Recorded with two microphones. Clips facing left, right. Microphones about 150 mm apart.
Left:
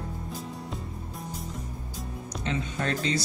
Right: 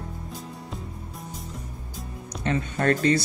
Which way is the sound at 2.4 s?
55° right (ahead or behind).